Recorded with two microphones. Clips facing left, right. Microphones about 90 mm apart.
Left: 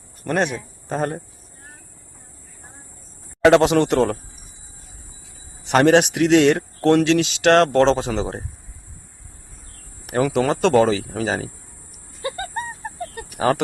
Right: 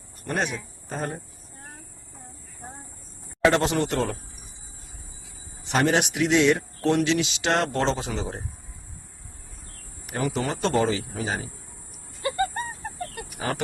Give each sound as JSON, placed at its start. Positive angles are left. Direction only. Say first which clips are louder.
{"t": 0.3, "sound": "speech", "louder": "left 6 dB", "side_deg": 60}
{"t": 3.4, "sound": "speech", "louder": "left 7 dB", "side_deg": 85}
{"t": 5.6, "sound": "speech", "louder": "left 8 dB", "side_deg": 70}
{"t": 10.1, "sound": "speech", "louder": "left 8 dB", "side_deg": 90}
{"t": 13.3, "sound": "speech", "louder": "left 11 dB", "side_deg": 70}